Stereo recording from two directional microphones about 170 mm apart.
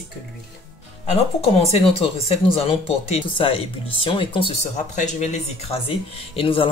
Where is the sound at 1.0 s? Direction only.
35° left (ahead or behind).